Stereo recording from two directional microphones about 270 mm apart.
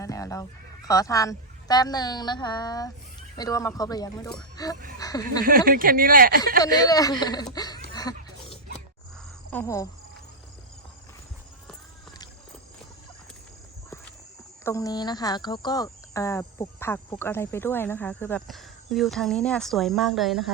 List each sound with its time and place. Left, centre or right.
0.0 s a sound: centre
0.9 s speech: centre
5.5 s speech: right
6.6 s speech: centre
7.9 s pig: centre
9.5 s speech: centre
14.6 s speech: centre